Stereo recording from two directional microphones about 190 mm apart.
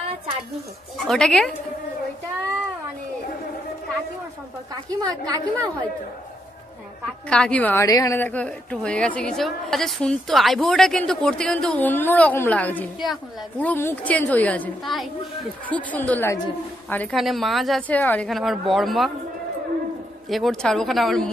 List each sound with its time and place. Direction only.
1.0 s a woman's voice: 5° left (ahead or behind)
4.8 s a woman's voice: 20° right (ahead or behind)
7.2 s a woman's voice: 5° left (ahead or behind)
20.2 s a woman's voice: centre (ahead or behind)